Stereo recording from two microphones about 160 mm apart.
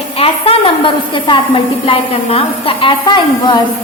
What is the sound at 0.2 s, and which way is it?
A woman's voice, 35° left (ahead or behind).